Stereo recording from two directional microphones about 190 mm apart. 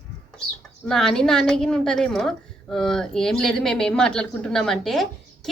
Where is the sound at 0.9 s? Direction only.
5° left (ahead or behind).